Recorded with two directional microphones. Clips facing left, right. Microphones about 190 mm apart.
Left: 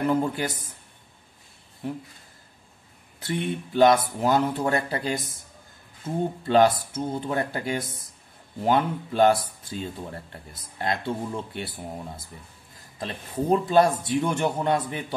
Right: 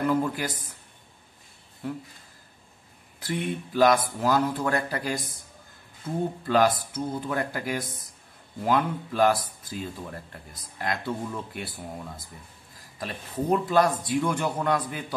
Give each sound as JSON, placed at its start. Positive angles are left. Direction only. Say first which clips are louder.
{"t": 0.1, "sound": "speech", "louder": "left 1 dB", "side_deg": 25}
{"t": 3.3, "sound": "speech", "louder": "left 1 dB", "side_deg": 25}
{"t": 6.4, "sound": "speech", "louder": "left 4 dB", "side_deg": 25}
{"t": 13.0, "sound": "speech", "louder": "left 2 dB", "side_deg": 25}